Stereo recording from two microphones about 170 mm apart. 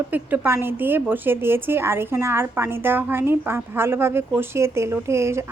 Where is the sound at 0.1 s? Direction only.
15° right (ahead or behind).